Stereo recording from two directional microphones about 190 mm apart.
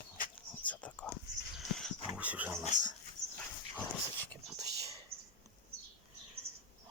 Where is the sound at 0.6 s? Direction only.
10° left (ahead or behind).